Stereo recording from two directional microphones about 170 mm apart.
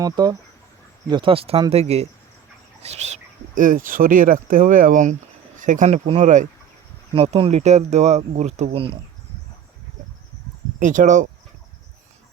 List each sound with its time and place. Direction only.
0.0 s speech: 20° right (ahead or behind); by 6.5 s 45° right (ahead or behind)
7.1 s speech: 30° right (ahead or behind)
10.8 s speech: 50° right (ahead or behind)